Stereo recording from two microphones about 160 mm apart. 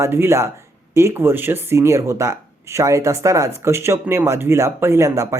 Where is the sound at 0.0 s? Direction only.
15° right (ahead or behind).